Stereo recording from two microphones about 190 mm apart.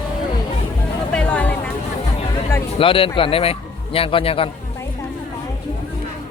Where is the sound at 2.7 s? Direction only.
30° left (ahead or behind).